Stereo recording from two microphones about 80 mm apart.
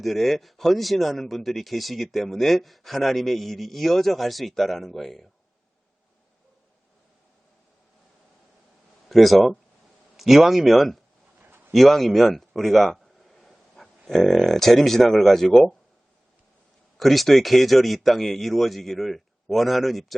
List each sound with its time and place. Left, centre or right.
0.0 s speech: centre
9.0 s speech: centre
11.3 s a sound: right
11.7 s a sound: centre
14.1 s speech: centre
17.0 s speech: centre